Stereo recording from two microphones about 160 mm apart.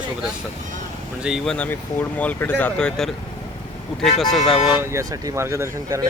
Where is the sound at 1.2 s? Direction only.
Centre (ahead or behind).